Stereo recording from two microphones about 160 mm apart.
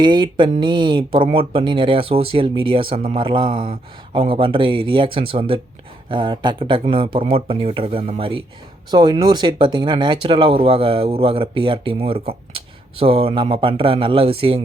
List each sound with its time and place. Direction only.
0.0 s speech: 30° right (ahead or behind)